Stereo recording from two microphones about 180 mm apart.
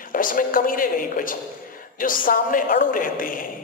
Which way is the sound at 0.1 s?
50° left (ahead or behind).